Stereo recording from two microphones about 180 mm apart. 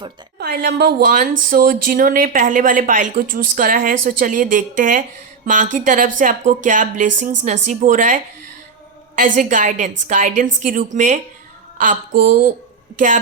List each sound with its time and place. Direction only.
0.3 s a woman's voice: 60° right (ahead or behind)